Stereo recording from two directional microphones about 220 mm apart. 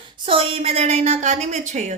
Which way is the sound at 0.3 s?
25° right (ahead or behind).